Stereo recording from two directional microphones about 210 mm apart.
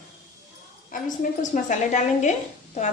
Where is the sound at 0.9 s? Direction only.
40° left (ahead or behind).